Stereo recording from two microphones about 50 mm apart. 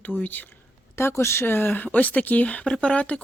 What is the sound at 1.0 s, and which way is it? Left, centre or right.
Speech, left.